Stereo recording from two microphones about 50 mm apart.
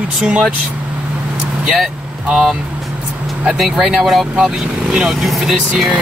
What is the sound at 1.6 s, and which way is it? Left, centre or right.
Speech, centre.